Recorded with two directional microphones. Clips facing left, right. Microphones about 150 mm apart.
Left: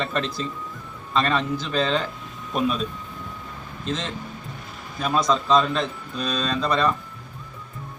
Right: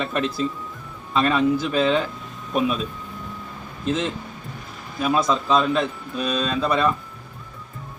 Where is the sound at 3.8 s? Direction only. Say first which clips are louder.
Right 5 dB; 10° right (ahead or behind).